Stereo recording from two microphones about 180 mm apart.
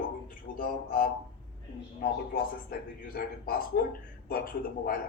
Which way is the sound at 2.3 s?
55° left (ahead or behind).